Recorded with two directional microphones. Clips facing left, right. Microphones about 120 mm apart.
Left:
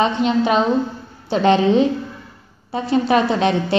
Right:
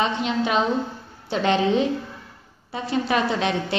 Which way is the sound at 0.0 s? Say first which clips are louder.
Left 6 dB; 35° left (ahead or behind).